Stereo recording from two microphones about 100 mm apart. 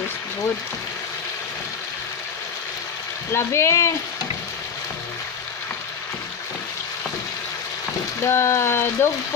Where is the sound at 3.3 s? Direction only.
25° left (ahead or behind).